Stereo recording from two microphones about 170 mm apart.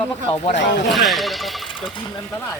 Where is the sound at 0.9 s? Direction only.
Centre (ahead or behind).